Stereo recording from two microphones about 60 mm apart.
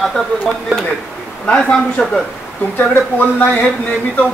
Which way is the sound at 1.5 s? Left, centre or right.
Centre.